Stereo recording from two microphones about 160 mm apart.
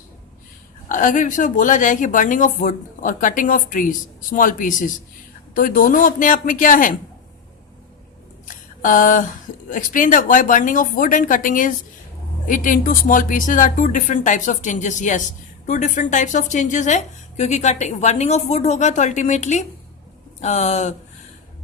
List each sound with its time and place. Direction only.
0.9 s a woman's voice: 55° left (ahead or behind)
8.4 s a sound: 55° left (ahead or behind)
9.6 s a woman's voice: 55° left (ahead or behind)